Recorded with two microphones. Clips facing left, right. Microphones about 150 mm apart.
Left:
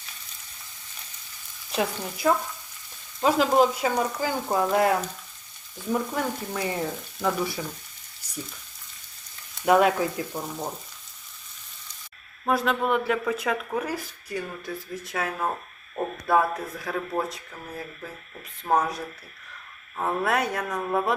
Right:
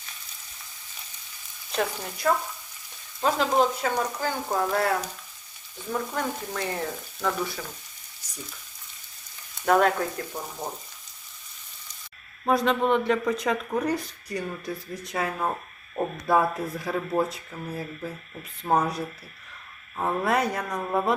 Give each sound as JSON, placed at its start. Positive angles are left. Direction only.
{"t": 1.7, "sound": "speech", "side_deg": 5}
{"t": 3.2, "sound": "frying", "side_deg": 5}
{"t": 9.6, "sound": "frying", "side_deg": 5}
{"t": 12.5, "sound": "speech", "side_deg": 0}